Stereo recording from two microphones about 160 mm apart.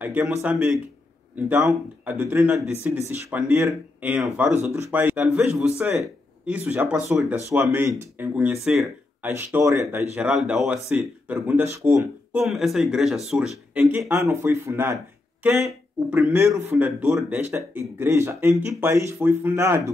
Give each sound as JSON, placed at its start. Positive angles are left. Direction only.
{"t": 0.0, "sound": "a man's voice", "side_deg": -10}
{"t": 15.6, "sound": "speech", "side_deg": -5}
{"t": 16.3, "sound": "a man's voice", "side_deg": -15}